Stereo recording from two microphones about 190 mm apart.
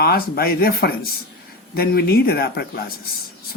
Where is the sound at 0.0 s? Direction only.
55° left (ahead or behind).